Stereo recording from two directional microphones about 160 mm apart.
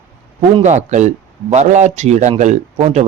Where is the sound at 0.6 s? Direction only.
45° right (ahead or behind).